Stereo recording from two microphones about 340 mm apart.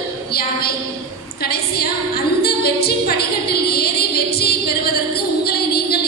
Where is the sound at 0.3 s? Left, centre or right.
Left.